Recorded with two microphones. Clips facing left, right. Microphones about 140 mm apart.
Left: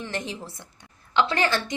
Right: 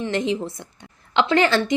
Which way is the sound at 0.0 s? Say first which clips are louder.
Right 10 dB; 20° right (ahead or behind).